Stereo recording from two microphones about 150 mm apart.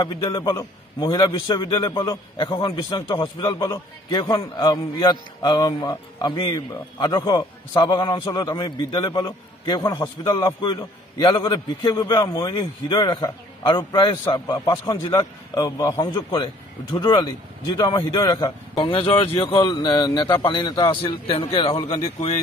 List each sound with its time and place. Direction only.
0.0 s a man's voice: 30° left (ahead or behind)